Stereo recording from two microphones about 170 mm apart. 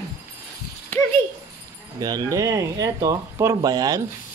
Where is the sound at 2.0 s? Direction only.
25° right (ahead or behind).